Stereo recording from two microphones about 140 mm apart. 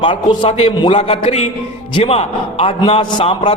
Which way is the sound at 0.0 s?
35° left (ahead or behind).